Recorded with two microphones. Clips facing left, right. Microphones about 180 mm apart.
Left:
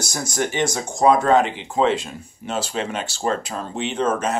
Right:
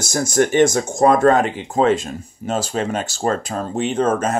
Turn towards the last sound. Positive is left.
turn(degrees=-45)  # may be behind; listen again after turning